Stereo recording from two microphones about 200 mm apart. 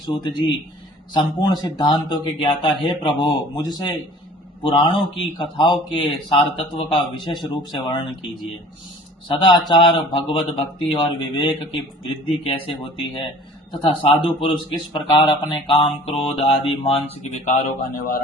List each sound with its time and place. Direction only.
0.0 s speech: 25° left (ahead or behind)
9.3 s speech: 25° left (ahead or behind)